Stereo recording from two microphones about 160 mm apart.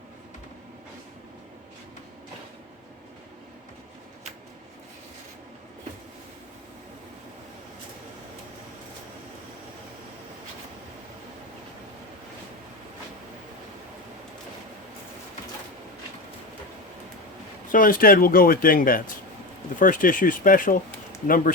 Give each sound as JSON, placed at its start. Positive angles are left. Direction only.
{"t": 17.7, "sound": "speech", "side_deg": 60}